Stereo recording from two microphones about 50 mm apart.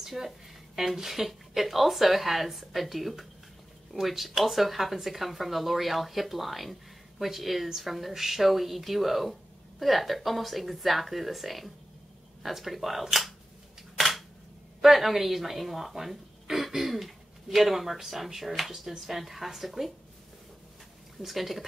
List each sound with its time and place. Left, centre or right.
0.0 s speech: centre
13.9 s camera: centre
14.8 s speech: centre
21.2 s speech: centre